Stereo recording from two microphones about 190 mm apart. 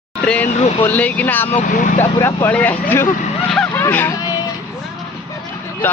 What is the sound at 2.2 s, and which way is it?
Speech, 10° left (ahead or behind).